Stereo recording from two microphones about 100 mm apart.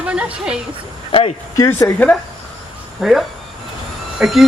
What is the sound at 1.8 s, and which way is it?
Speech, 15° left (ahead or behind).